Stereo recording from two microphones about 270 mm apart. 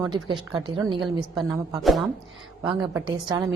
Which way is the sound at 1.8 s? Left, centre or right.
Centre.